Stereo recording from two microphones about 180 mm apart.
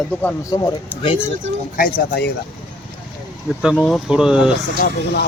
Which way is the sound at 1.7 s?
50° left (ahead or behind).